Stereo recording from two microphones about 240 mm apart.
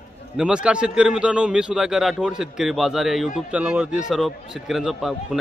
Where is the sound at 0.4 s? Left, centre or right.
Centre.